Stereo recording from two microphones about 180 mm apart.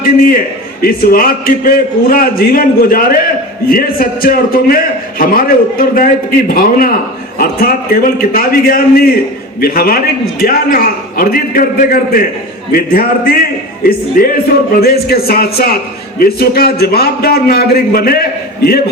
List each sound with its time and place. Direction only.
0.8 s a man's voice: 55° left (ahead or behind)